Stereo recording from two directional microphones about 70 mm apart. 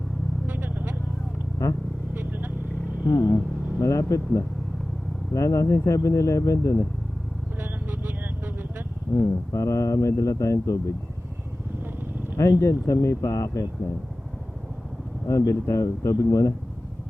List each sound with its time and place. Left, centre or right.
0.4 s vehicle: right
1.6 s speech: left
2.1 s vehicle: right
3.0 s vehicle: left
3.8 s speech: left
7.6 s vehicle: right
9.1 s speech: left
12.4 s speech: left
15.3 s speech: left